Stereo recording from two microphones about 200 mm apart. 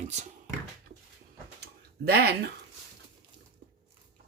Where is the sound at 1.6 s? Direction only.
55° right (ahead or behind).